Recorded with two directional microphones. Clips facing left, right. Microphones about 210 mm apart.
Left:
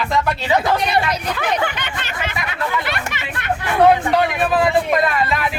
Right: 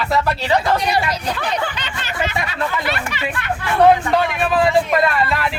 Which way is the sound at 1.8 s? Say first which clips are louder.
Left 1 dB; 55° left (ahead or behind).